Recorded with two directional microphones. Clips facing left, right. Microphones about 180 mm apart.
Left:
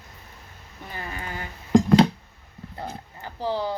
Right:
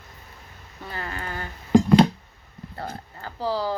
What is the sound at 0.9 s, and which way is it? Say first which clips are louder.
Speech: right 2 dB; 15° left (ahead or behind).